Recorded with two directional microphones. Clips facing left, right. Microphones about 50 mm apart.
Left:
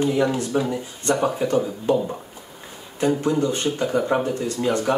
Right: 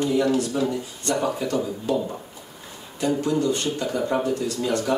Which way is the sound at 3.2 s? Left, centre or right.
Left.